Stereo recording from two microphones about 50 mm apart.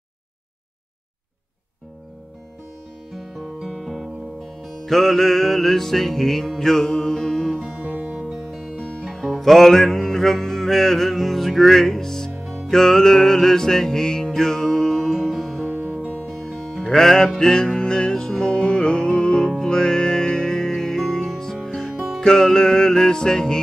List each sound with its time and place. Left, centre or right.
3.2 s music: centre
7.9 s music: right
8.2 s music: centre
12.4 s music: centre
12.7 s music: centre
15.6 s music: right
16.3 s music: centre
21.6 s music: centre